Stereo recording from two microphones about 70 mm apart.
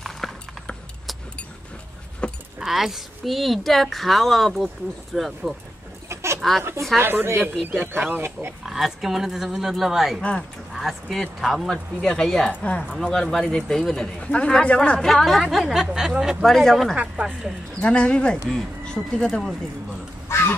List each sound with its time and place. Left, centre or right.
2.2 s keys jangling: centre
2.6 s a woman's voice: centre
6.0 s a sound: right
6.6 s speech: right
8.6 s a woman's voice: centre
16.4 s a woman's voice: centre
16.9 s speech: centre
17.3 s a woman's voice: centre
17.7 s a woman's voice: centre
20.2 s a sound: left